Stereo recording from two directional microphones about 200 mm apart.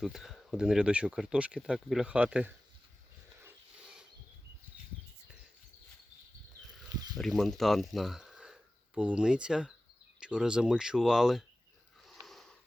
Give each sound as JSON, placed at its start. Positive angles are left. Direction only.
{"t": 0.0, "sound": "speech", "side_deg": 0}
{"t": 7.2, "sound": "speech", "side_deg": 0}
{"t": 12.2, "sound": "wheeze", "side_deg": 0}